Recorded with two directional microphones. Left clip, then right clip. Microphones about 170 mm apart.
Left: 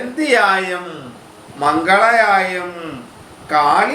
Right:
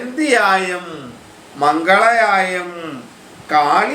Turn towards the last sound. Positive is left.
turn(degrees=-20)  # may be behind; listen again after turning